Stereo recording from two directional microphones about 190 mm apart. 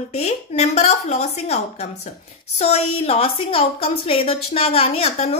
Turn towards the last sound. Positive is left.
turn(degrees=35)  # may be behind; listen again after turning